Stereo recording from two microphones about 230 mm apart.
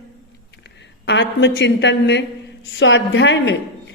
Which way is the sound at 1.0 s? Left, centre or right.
Left.